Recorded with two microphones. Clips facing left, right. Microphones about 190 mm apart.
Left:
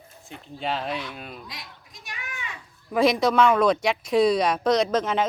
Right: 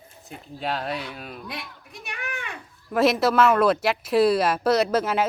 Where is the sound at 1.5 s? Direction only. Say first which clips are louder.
Right 6 dB; 60° right (ahead or behind).